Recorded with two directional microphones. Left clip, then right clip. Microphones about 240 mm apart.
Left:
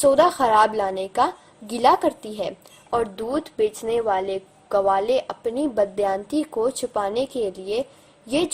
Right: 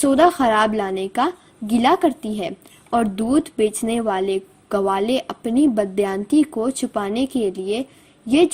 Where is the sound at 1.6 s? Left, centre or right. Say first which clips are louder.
Right 1 dB; right.